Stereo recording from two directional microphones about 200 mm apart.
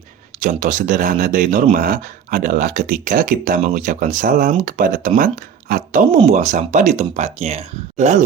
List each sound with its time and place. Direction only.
0.3 s speech: 40° right (ahead or behind)